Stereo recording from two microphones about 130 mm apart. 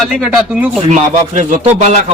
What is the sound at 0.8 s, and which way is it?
Speech, 60° right (ahead or behind).